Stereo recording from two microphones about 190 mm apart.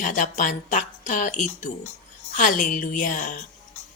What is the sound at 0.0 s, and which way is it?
A woman's voice, 40° left (ahead or behind).